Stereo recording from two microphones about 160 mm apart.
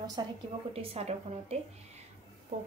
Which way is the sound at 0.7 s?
40° right (ahead or behind).